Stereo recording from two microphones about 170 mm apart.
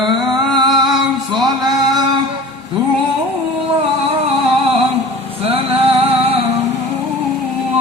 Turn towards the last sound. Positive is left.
turn(degrees=-35)  # may be behind; listen again after turning